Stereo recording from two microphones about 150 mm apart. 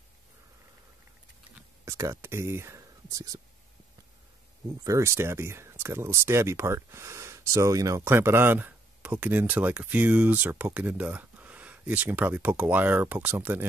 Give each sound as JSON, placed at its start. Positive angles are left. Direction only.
{"t": 1.9, "sound": "speech", "side_deg": -20}
{"t": 4.8, "sound": "speech", "side_deg": -20}